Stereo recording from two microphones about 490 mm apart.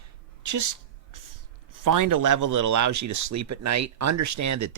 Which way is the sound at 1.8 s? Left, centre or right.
Right.